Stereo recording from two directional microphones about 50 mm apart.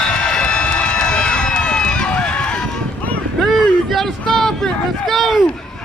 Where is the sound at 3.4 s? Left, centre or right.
Centre.